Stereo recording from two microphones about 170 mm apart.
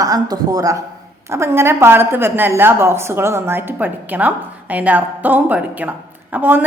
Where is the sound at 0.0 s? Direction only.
20° right (ahead or behind).